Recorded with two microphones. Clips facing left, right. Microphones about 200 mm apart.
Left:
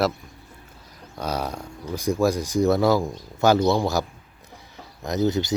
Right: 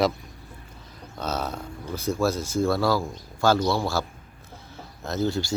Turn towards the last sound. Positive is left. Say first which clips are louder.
# left 3 dB
turn(degrees=20)  # may be behind; listen again after turning